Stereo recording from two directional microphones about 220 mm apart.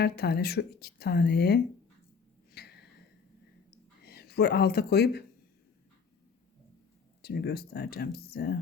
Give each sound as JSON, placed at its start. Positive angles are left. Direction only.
{"t": 0.0, "sound": "speech", "side_deg": 45}
{"t": 2.5, "sound": "a sound", "side_deg": 45}
{"t": 7.2, "sound": "speech", "side_deg": 45}